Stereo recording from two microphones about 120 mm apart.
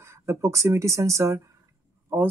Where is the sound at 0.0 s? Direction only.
20° right (ahead or behind).